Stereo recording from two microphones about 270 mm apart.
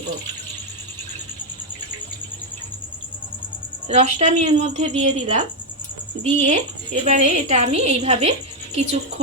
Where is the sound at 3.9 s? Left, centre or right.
Right.